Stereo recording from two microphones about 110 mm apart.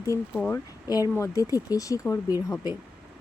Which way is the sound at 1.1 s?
30° left (ahead or behind).